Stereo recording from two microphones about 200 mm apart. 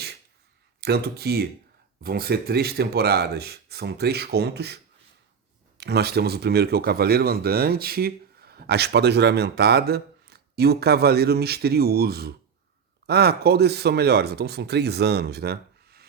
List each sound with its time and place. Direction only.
0.8 s speech: 55° right (ahead or behind)